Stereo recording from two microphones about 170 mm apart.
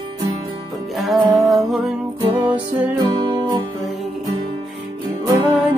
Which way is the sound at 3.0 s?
25° right (ahead or behind).